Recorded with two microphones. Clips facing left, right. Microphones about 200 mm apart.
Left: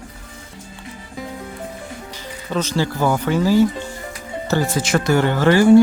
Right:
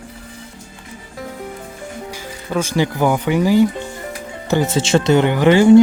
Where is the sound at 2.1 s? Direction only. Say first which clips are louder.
Right 2 dB; 10° right (ahead or behind).